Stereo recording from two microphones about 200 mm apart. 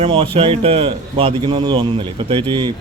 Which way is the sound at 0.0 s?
25° right (ahead or behind).